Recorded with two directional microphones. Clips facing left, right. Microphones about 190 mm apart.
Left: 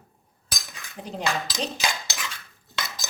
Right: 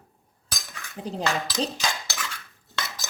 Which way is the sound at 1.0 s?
35° right (ahead or behind).